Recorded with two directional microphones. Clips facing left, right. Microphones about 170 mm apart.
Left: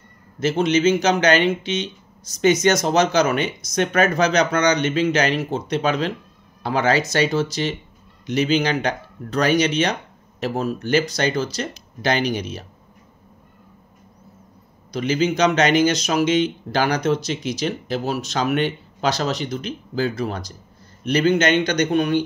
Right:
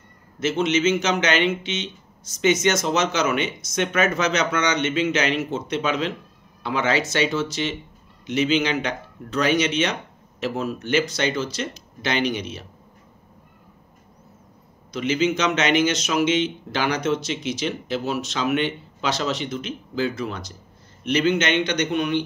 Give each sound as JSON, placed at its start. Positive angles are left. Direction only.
{"t": 0.4, "sound": "speech", "side_deg": 35}
{"t": 14.9, "sound": "speech", "side_deg": 40}